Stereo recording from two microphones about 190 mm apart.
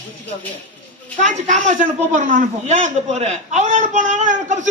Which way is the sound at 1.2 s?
40° right (ahead or behind).